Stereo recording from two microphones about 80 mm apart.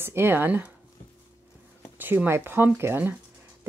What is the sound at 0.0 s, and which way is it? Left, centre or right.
Speech, right.